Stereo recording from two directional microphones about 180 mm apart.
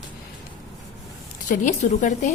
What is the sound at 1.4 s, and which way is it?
Speech, 45° left (ahead or behind).